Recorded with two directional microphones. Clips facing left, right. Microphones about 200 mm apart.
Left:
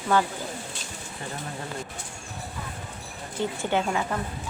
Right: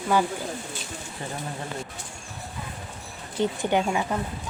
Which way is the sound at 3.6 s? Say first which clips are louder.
Left 1 dB; 15° right (ahead or behind).